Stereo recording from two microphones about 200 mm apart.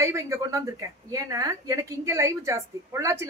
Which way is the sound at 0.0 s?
15° right (ahead or behind).